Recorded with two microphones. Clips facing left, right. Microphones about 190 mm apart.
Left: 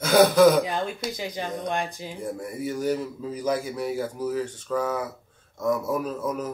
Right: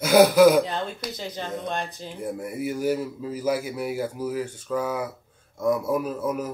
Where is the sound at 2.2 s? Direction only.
10° right (ahead or behind).